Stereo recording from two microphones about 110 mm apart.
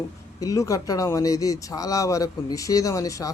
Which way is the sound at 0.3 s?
30° left (ahead or behind).